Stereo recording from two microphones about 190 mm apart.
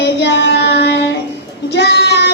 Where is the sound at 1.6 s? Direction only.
60° left (ahead or behind).